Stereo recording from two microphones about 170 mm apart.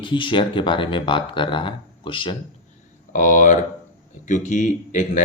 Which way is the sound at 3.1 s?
50° left (ahead or behind).